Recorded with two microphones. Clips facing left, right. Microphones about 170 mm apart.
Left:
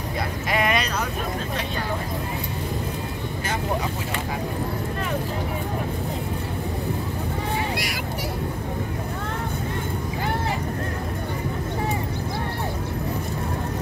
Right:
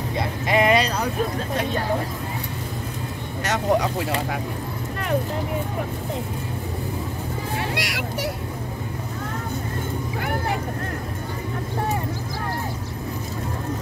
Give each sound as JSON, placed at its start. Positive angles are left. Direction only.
{"t": 0.5, "sound": "vehicle", "side_deg": -30}
{"t": 3.4, "sound": "speech", "side_deg": -75}
{"t": 7.5, "sound": "a sound", "side_deg": -80}